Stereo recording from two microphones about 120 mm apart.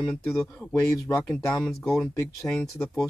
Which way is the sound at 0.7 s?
25° left (ahead or behind).